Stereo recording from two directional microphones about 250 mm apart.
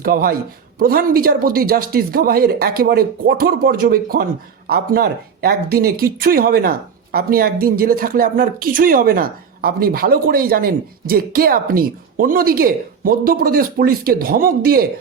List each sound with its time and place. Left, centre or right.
0.0 s speech: right